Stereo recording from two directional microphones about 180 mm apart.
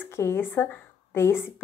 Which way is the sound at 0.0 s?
15° left (ahead or behind).